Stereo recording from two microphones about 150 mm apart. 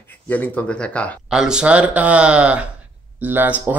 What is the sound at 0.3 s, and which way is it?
Speech, 10° left (ahead or behind).